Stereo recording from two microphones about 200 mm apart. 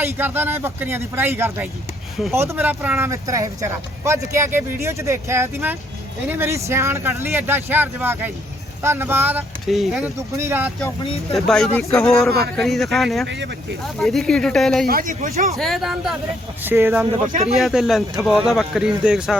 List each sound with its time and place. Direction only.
0.0 s speech: 10° right (ahead or behind)
11.3 s speech: centre (ahead or behind)
11.9 s speech: 15° left (ahead or behind)
12.5 s speech: centre (ahead or behind)
14.8 s a man's voice: 45° right (ahead or behind)
15.5 s speech: centre (ahead or behind)
17.4 s speech: centre (ahead or behind)